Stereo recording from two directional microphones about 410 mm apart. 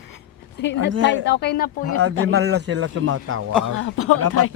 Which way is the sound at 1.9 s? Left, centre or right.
Right.